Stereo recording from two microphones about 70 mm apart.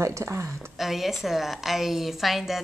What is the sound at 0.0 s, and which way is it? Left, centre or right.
Speech, right.